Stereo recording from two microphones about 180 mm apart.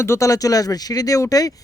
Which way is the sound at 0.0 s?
15° left (ahead or behind).